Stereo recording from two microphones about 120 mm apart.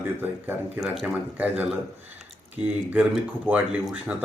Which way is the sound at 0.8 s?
Centre (ahead or behind).